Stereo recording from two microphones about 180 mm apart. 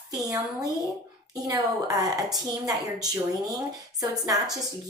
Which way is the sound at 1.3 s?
20° right (ahead or behind).